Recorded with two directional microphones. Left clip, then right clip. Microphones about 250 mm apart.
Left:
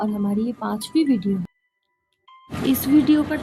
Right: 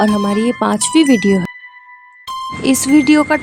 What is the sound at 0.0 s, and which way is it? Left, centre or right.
Speech, right.